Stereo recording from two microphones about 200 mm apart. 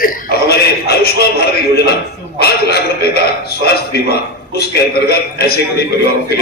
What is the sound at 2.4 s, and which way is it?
A man's voice, 50° left (ahead or behind).